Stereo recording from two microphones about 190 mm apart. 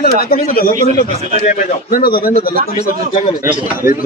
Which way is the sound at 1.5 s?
40° left (ahead or behind).